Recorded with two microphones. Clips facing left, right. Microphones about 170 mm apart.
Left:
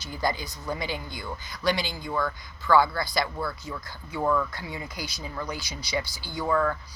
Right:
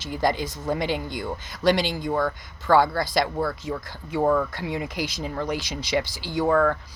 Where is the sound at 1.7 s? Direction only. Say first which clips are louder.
Right 7 dB; 85° right.